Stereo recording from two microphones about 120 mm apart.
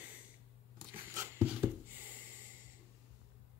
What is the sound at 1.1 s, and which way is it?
Dog, 15° right (ahead or behind).